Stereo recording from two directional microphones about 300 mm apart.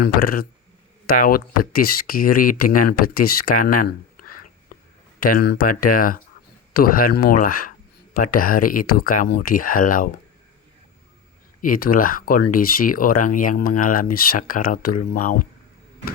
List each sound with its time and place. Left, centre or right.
0.0 s speech: left
11.6 s speech: left